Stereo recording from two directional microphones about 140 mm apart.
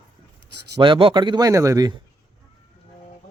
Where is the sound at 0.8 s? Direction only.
40° right (ahead or behind).